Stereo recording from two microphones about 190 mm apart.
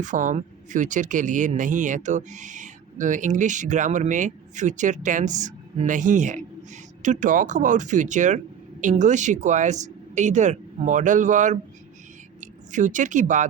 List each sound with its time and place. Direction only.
0.0 s speech: 40° right (ahead or behind)